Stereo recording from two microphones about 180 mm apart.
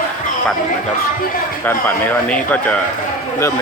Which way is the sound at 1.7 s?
10° left (ahead or behind).